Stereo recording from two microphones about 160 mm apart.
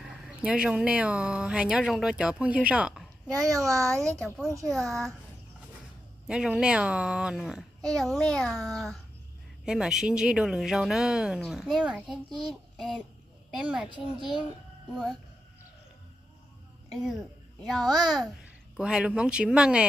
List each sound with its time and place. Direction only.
0.0 s speech: 5° right (ahead or behind)
3.3 s a child's voice: 20° right (ahead or behind)
4.7 s speech: centre (ahead or behind)
6.2 s a child's voice: 5° right (ahead or behind)
16.9 s speech: centre (ahead or behind)